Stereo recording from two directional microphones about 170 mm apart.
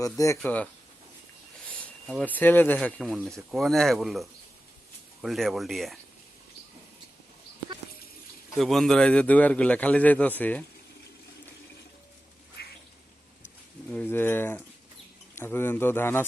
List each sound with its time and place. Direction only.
0.0 s a man's voice: 20° left (ahead or behind)
2.0 s speech: 5° left (ahead or behind)
8.5 s a man's voice: centre (ahead or behind)
12.6 s a sound: 70° left (ahead or behind)
13.9 s a man's voice: 10° left (ahead or behind)